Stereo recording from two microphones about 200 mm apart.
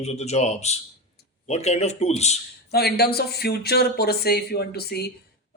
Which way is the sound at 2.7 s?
50° left (ahead or behind).